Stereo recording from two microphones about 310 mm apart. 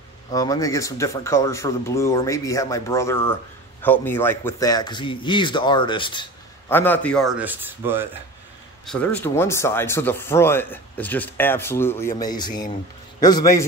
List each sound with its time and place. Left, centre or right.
0.3 s speech: centre
8.8 s speech: centre